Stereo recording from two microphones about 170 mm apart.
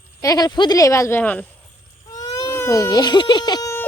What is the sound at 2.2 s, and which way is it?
Speech, 20° left (ahead or behind).